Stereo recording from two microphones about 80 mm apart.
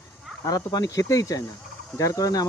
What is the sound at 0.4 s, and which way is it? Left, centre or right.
Speech, left.